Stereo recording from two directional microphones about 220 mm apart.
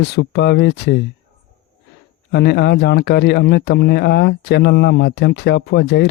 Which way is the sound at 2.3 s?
50° left (ahead or behind).